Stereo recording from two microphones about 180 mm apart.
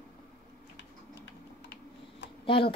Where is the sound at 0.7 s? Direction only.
80° left.